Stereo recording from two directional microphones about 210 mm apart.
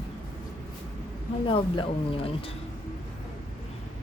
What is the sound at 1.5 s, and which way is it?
Speech, 25° left (ahead or behind).